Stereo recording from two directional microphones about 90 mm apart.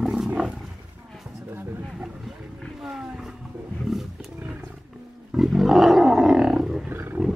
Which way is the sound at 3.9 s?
Centre (ahead or behind).